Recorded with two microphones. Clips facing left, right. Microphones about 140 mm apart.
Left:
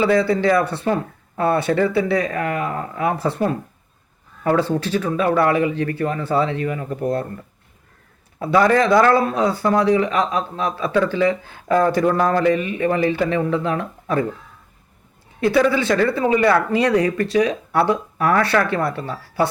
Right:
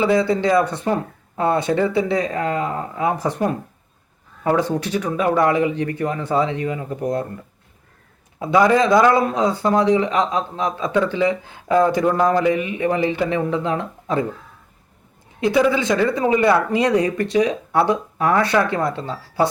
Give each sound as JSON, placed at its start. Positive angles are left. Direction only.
{"t": 0.0, "sound": "speech", "side_deg": -20}
{"t": 8.4, "sound": "speech", "side_deg": -15}
{"t": 15.4, "sound": "speech", "side_deg": -15}